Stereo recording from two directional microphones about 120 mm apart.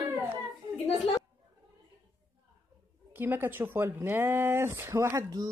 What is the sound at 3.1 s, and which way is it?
A woman's voice, 20° right (ahead or behind).